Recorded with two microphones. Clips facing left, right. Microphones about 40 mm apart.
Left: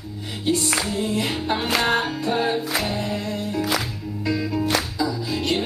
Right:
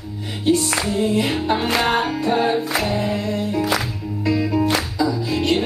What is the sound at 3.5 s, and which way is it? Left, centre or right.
Music, centre.